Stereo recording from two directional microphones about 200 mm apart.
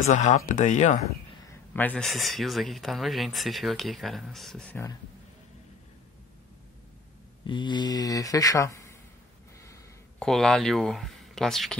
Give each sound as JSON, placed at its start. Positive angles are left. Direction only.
{"t": 0.1, "sound": "speech", "side_deg": 35}
{"t": 1.5, "sound": "speech", "side_deg": 10}
{"t": 7.4, "sound": "speech", "side_deg": 25}
{"t": 9.6, "sound": "gasp", "side_deg": 15}
{"t": 10.2, "sound": "speech", "side_deg": 0}